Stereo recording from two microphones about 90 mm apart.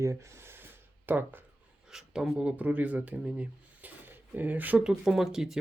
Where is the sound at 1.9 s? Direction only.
5° right (ahead or behind).